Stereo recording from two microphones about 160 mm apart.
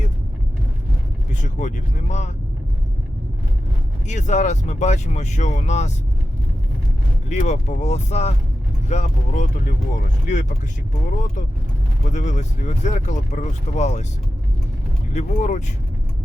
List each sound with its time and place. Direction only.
1.3 s speech: 50° left (ahead or behind)
4.0 s speech: 50° left (ahead or behind)
7.3 s speech: 45° left (ahead or behind)
12.0 s speech: 50° left (ahead or behind)
15.1 s speech: 50° left (ahead or behind)